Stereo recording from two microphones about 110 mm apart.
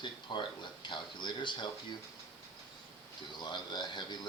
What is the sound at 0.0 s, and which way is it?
Speech, 45° left (ahead or behind).